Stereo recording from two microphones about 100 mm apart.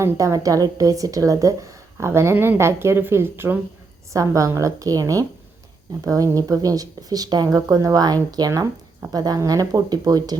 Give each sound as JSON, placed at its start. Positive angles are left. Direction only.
{"t": 0.0, "sound": "a woman's voice", "side_deg": -30}
{"t": 4.1, "sound": "speech", "side_deg": -35}